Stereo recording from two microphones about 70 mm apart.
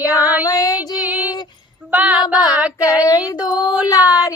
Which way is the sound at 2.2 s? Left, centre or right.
Left.